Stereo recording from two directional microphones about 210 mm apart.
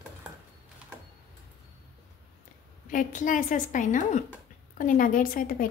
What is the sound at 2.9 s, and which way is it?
A woman's voice, 40° left (ahead or behind).